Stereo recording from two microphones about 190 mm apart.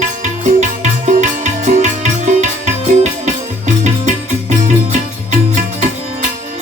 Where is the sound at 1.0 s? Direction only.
40° right (ahead or behind).